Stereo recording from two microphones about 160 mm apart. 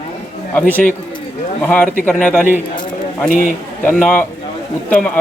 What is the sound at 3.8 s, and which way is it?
Speech, 10° left (ahead or behind).